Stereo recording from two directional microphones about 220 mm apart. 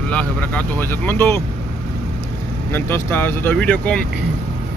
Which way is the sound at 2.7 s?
10° left (ahead or behind).